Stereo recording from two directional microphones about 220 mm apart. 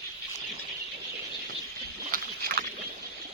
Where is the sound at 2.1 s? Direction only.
45° right (ahead or behind).